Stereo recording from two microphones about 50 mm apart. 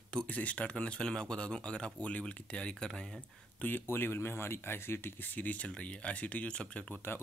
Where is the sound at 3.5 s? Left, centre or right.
Left.